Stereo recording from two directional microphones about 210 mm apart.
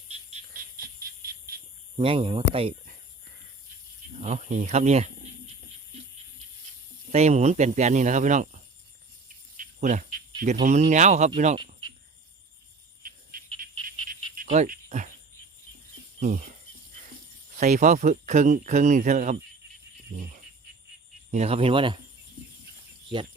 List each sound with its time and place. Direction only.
0.1 s frog: 30° right (ahead or behind)
1.2 s a sound: 45° right (ahead or behind)
2.0 s speech: 25° right (ahead or behind)
4.2 s speech: 35° right (ahead or behind)
7.1 s speech: 30° right (ahead or behind)
11.5 s insect: 25° right (ahead or behind)
13.0 s cricket: 40° right (ahead or behind)
14.4 s insect: 35° right (ahead or behind)
16.2 s speech: 35° right (ahead or behind)
17.6 s speech: 35° right (ahead or behind)